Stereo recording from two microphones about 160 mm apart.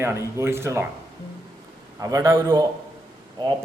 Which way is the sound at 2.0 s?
20° right (ahead or behind).